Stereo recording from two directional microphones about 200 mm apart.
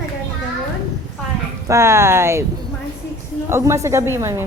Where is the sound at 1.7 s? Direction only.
15° right (ahead or behind).